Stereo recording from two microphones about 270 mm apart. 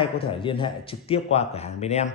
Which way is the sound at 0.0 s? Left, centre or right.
Centre.